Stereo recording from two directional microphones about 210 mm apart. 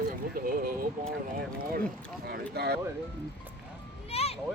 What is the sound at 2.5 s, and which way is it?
Speech, 50° right (ahead or behind).